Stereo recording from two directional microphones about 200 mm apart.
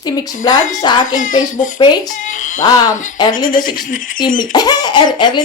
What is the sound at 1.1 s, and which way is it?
Speech, 40° left (ahead or behind).